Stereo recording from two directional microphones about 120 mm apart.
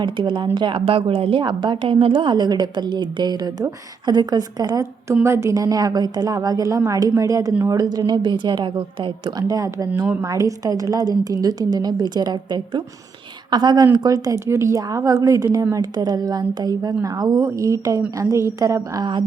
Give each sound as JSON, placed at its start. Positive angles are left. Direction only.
{"t": 0.0, "sound": "a woman's voice", "side_deg": -40}
{"t": 9.5, "sound": "a woman's voice", "side_deg": -25}